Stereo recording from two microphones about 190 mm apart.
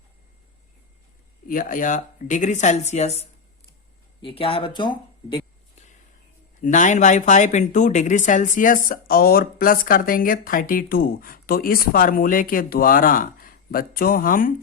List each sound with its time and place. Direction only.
1.5 s speech: 45° left (ahead or behind)
4.2 s speech: 25° left (ahead or behind)
6.6 s speech: 40° left (ahead or behind)